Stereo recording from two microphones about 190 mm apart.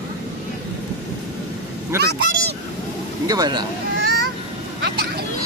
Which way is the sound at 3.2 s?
20° right (ahead or behind).